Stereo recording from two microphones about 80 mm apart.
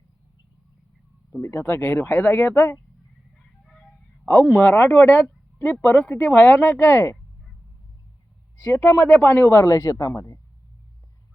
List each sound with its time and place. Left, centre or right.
1.4 s speech: left
3.3 s a sound: centre
4.3 s speech: left
8.6 s speech: left
9.5 s speech: left